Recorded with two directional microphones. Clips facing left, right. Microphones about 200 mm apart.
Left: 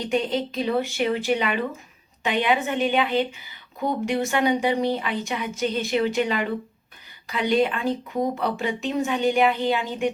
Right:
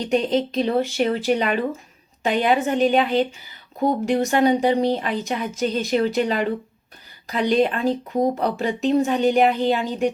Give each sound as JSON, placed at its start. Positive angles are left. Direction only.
{"t": 0.1, "sound": "a woman's voice", "side_deg": -35}